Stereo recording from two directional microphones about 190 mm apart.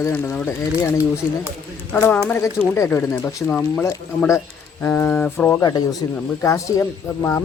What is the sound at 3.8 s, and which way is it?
Speech, 15° left (ahead or behind).